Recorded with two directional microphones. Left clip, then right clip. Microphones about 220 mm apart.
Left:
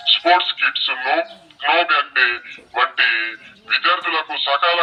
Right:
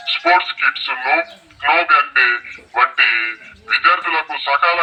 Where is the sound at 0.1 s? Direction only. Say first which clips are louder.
Even; centre (ahead or behind).